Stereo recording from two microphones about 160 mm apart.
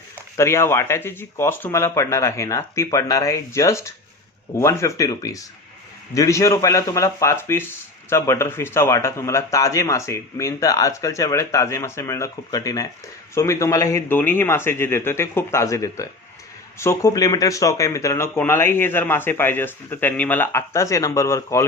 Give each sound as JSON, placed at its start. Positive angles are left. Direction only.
{"t": 0.3, "sound": "a man's voice", "side_deg": 15}